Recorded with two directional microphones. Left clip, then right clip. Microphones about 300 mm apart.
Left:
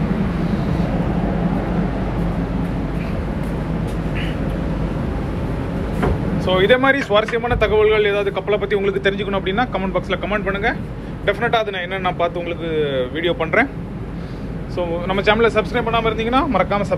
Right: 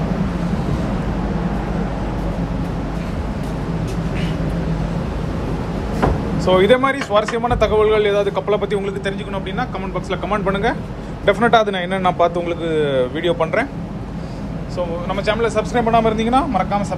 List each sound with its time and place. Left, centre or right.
6.4 s speech: centre
14.8 s speech: centre